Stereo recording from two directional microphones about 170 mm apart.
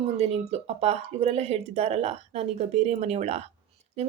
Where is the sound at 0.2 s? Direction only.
35° right (ahead or behind).